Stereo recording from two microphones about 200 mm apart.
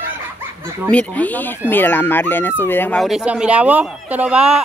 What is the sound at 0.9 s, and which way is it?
Speech, 10° left (ahead or behind).